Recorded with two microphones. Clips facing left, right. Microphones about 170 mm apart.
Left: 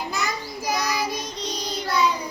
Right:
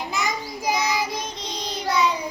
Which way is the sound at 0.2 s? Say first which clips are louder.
Right 1 dB; 15° right (ahead or behind).